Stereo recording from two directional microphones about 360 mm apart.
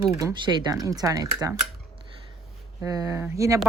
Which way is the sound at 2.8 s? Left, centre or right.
Centre.